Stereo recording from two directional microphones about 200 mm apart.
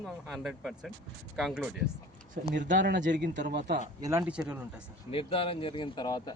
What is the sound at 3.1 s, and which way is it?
Speech, 60° right (ahead or behind).